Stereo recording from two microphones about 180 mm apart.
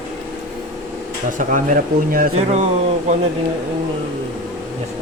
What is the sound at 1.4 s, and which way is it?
Speech, 50° right (ahead or behind).